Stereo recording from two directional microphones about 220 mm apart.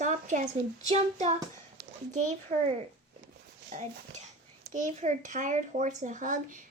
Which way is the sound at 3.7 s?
35° right (ahead or behind).